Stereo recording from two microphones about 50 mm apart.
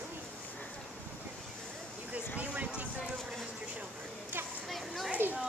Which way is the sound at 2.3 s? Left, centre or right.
Right.